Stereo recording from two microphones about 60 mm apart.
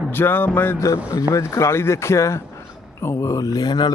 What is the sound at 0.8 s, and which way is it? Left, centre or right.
Speech, left.